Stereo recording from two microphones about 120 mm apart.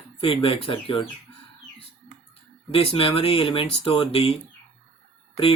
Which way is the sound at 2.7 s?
50° left (ahead or behind).